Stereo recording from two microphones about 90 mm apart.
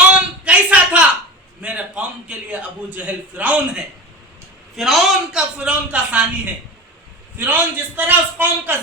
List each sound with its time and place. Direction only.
0.1 s a sound: 15° right (ahead or behind)
1.6 s a man's voice: 15° right (ahead or behind)
4.8 s a man's voice: centre (ahead or behind); by 8.8 s 20° right (ahead or behind)